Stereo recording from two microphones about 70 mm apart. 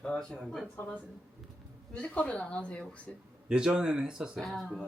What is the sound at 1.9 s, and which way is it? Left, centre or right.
Speech, centre.